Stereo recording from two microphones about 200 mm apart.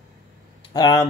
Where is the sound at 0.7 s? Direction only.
20° left (ahead or behind).